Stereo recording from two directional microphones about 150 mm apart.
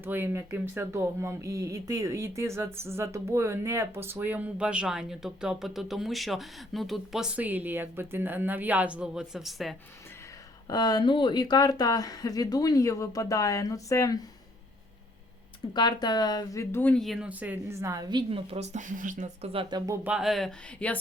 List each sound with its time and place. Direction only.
0.0 s speech: 15° right (ahead or behind)
10.7 s speech: 25° left (ahead or behind)
15.7 s speech: 30° left (ahead or behind)
16.9 s a woman's voice: centre (ahead or behind); by 19.5 s 55° right (ahead or behind)
19.7 s speech: 30° right (ahead or behind)
20.1 s speech: 5° right (ahead or behind)